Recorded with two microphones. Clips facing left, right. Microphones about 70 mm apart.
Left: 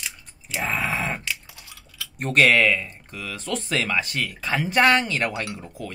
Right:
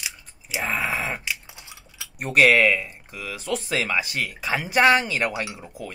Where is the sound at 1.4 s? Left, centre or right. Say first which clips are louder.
Right 1 dB; right.